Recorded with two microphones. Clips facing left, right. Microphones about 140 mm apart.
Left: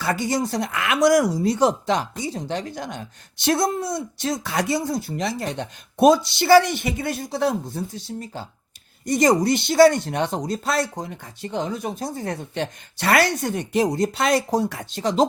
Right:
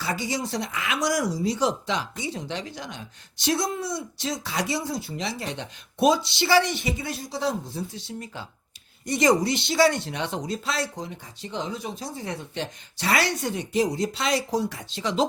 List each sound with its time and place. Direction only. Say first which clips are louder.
0.0 s speech: left 6 dB; 55° left (ahead or behind)